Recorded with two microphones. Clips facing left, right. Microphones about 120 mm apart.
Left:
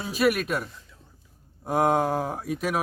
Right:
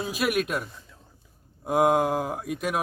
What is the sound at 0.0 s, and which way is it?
A man's voice, centre (ahead or behind).